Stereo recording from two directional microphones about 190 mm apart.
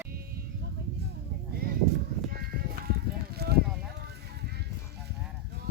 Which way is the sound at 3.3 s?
60° right (ahead or behind).